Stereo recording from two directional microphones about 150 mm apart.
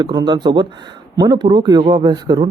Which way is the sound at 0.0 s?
30° right (ahead or behind).